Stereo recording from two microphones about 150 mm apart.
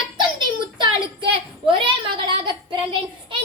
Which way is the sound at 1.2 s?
35° right (ahead or behind).